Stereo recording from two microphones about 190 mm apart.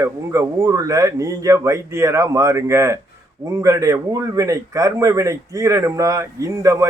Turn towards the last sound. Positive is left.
turn(degrees=-15)  # may be behind; listen again after turning